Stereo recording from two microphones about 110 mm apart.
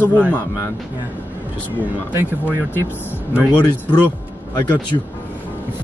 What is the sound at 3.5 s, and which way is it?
Speech, 40° left (ahead or behind).